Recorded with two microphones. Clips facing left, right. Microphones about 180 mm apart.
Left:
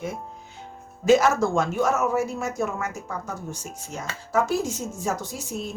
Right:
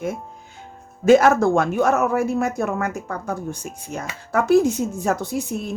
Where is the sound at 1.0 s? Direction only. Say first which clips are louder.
Right 5 dB; 55° right (ahead or behind).